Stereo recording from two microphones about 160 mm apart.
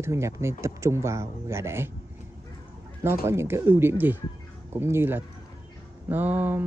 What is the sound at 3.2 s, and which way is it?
Speech, 15° right (ahead or behind).